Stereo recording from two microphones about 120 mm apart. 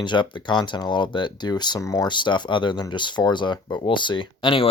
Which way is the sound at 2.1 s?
40° left (ahead or behind).